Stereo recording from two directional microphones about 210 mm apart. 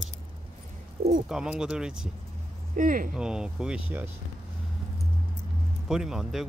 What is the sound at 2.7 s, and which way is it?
Speech, 40° right (ahead or behind).